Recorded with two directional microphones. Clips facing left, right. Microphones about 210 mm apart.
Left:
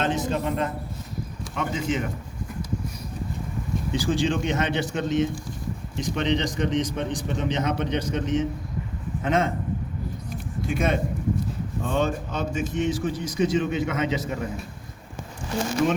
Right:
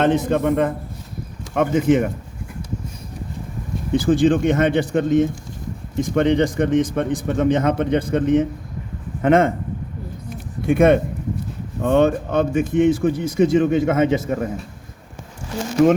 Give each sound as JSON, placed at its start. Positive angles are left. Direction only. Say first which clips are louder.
{"t": 0.0, "sound": "a man's voice", "louder": "right 8 dB", "side_deg": -60}
{"t": 3.9, "sound": "a man's voice", "louder": "right 9 dB", "side_deg": -55}
{"t": 10.6, "sound": "a man's voice", "louder": "right 10 dB", "side_deg": -60}